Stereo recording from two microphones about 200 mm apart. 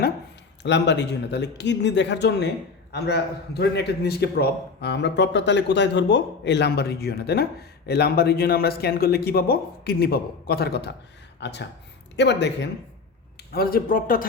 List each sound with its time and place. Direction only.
0.6 s a man's voice: 60° left (ahead or behind)
13.5 s a man's voice: 50° left (ahead or behind)